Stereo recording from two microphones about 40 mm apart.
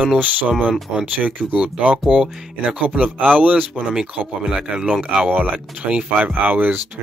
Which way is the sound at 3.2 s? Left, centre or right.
Right.